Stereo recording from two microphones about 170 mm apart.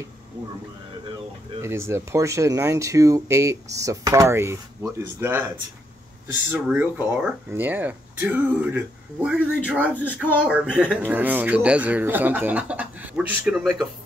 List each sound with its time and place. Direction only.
1.6 s speech: 15° right (ahead or behind)
6.5 s speech: 10° right (ahead or behind)